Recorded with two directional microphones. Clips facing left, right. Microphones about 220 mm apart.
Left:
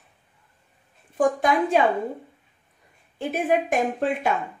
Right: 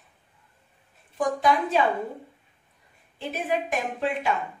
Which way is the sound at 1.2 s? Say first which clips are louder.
Left 3 dB; 50° left (ahead or behind).